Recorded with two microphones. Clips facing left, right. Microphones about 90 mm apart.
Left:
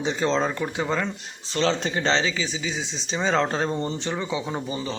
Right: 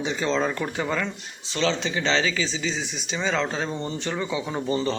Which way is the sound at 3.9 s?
20° left (ahead or behind).